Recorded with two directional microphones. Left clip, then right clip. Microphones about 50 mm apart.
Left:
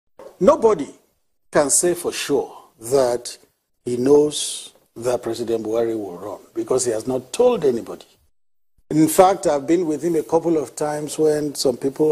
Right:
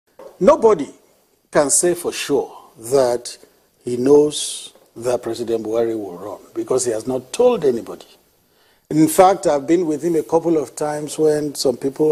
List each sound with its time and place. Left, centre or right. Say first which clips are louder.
0.2 s a man's voice: right 2 dB; right